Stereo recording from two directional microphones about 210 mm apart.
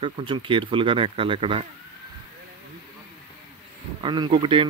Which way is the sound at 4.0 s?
20° right (ahead or behind).